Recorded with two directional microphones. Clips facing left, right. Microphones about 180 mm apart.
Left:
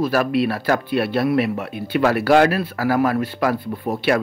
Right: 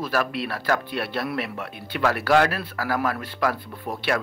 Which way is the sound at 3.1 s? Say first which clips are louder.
Left 6 dB; 25° left (ahead or behind).